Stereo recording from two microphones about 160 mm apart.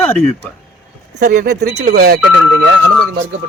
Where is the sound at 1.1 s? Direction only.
90° right.